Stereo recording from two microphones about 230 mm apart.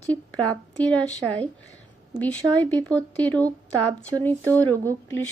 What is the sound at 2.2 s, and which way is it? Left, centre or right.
Speech, centre.